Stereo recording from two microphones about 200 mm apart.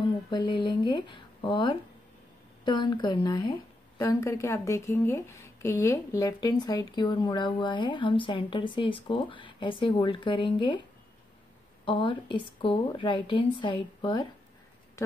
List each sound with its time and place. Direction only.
0.3 s a woman's voice: 25° left (ahead or behind)
11.8 s a woman's voice: 25° left (ahead or behind)